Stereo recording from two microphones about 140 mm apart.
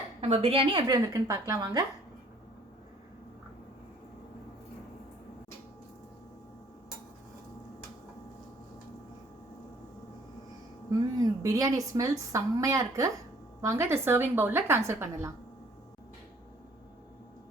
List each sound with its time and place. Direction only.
0.2 s a woman's voice: 45° right (ahead or behind)
0.9 s a woman's voice: 25° right (ahead or behind)
11.2 s a woman's voice: 25° right (ahead or behind)